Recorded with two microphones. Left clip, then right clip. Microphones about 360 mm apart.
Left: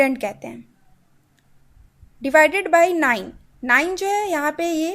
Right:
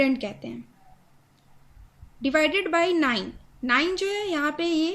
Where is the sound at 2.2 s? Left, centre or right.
Centre.